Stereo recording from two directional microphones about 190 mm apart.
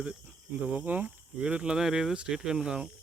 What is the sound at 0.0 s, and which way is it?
Speech, 5° right (ahead or behind).